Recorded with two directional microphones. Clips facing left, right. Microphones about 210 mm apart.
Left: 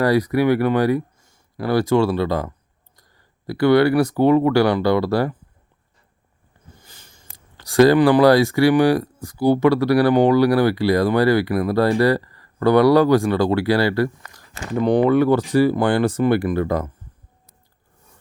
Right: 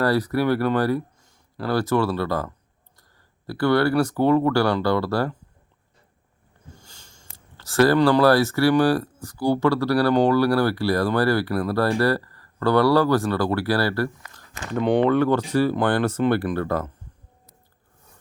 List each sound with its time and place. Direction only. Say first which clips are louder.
0.0 s speech: left 4 dB; 15° left (ahead or behind)
6.7 s speech: left 1 dB; 15° left (ahead or behind)
14.6 s speech: left 3 dB; 5° left (ahead or behind)